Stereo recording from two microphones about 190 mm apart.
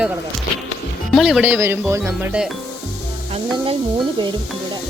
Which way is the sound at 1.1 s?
Centre (ahead or behind).